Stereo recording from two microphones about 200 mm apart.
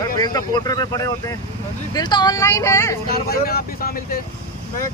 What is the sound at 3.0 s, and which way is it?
Speech, 50° left (ahead or behind).